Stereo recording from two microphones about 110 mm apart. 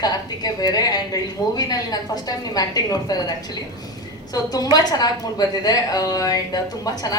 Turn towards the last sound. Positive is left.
turn(degrees=35)  # may be behind; listen again after turning